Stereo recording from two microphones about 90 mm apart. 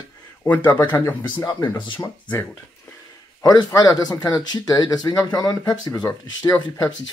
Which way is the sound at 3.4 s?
40° left (ahead or behind).